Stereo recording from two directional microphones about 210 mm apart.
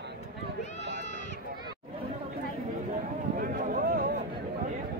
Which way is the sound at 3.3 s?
40° right (ahead or behind).